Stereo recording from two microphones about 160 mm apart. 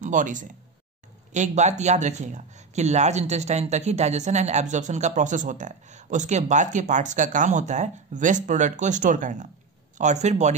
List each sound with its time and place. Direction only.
0.0 s speech: 55° right (ahead or behind)